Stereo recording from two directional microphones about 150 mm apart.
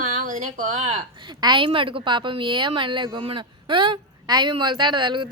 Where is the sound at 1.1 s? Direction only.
30° right (ahead or behind).